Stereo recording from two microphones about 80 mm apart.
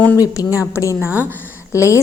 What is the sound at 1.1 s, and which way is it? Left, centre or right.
Speech, right.